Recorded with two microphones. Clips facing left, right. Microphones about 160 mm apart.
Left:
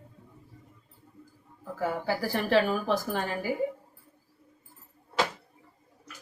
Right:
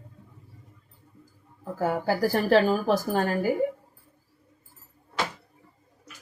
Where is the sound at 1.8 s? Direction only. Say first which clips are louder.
Right 5 dB; 40° right (ahead or behind).